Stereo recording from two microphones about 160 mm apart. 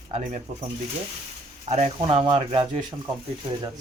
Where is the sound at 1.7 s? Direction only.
40° right (ahead or behind).